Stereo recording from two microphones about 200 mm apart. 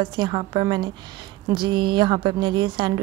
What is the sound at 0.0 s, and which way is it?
A woman's voice, 20° right (ahead or behind).